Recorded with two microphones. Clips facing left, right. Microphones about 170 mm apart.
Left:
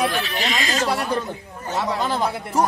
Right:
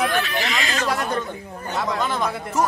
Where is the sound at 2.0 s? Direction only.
35° left (ahead or behind).